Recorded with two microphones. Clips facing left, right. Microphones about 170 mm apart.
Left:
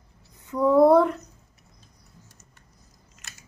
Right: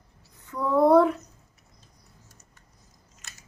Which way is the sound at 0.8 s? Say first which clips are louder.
Right 2 dB; centre (ahead or behind).